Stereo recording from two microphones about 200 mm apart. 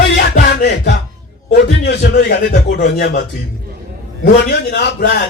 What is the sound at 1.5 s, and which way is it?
Speech, 55° left (ahead or behind).